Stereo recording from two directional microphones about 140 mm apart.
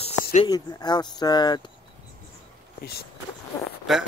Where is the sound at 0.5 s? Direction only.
30° left (ahead or behind).